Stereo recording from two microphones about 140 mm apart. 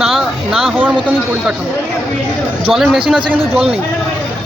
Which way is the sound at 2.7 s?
Centre (ahead or behind).